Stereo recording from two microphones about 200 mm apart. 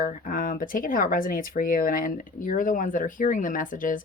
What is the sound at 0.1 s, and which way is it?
Speech, 40° left (ahead or behind).